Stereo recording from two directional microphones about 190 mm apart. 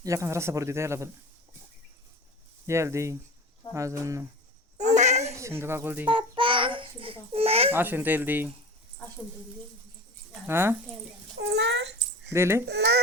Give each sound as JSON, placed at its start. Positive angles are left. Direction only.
{"t": 0.0, "sound": "speech", "side_deg": -15}
{"t": 2.6, "sound": "speech", "side_deg": -15}
{"t": 4.8, "sound": "a sound", "side_deg": -40}
{"t": 5.4, "sound": "speech", "side_deg": -15}
{"t": 6.1, "sound": "babbling", "side_deg": -25}
{"t": 7.7, "sound": "speech", "side_deg": -10}
{"t": 10.4, "sound": "speech", "side_deg": -10}
{"t": 11.3, "sound": "cat", "side_deg": -65}
{"t": 12.3, "sound": "speech", "side_deg": -15}
{"t": 12.6, "sound": "speech", "side_deg": -60}